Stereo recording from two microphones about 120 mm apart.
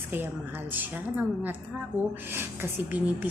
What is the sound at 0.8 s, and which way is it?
Speech, 15° right (ahead or behind).